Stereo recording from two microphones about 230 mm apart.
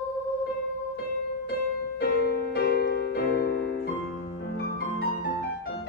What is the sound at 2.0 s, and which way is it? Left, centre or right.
Music, left.